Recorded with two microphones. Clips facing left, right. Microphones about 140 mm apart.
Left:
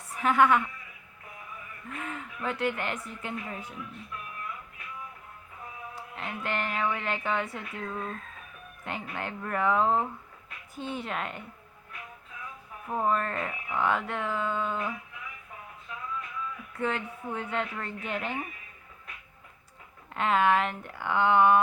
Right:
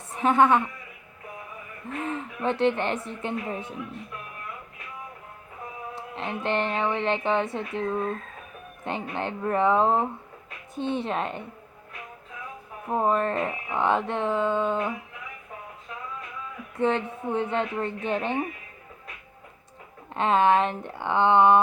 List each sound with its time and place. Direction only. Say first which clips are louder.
0.1 s a woman's voice: right 3 dB; 25° right (ahead or behind)
1.9 s speech: right 7 dB; 30° right (ahead or behind)
5.9 s speech: right 6 dB; 25° right (ahead or behind)
12.9 s speech: right 4 dB; 25° right (ahead or behind)
16.7 s speech: right 7 dB; 25° right (ahead or behind)
20.1 s speech: right 4 dB; 25° right (ahead or behind)